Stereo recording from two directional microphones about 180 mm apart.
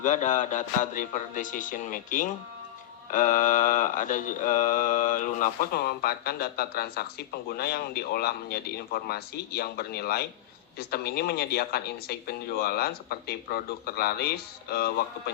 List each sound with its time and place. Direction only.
0.0 s a man's voice: 45° left (ahead or behind)
3.1 s mantra: 45° left (ahead or behind)